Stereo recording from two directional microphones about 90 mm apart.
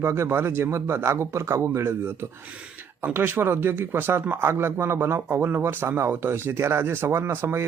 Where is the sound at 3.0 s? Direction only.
20° right (ahead or behind).